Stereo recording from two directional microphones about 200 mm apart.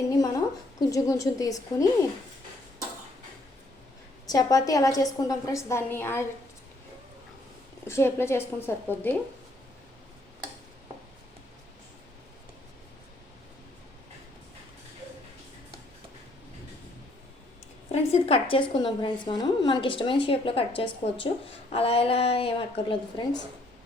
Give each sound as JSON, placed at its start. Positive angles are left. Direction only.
{"t": 0.2, "sound": "a woman's voice", "side_deg": 15}
{"t": 4.3, "sound": "a woman's voice", "side_deg": 20}
{"t": 7.9, "sound": "a woman's voice", "side_deg": 15}
{"t": 17.9, "sound": "a woman's voice", "side_deg": 30}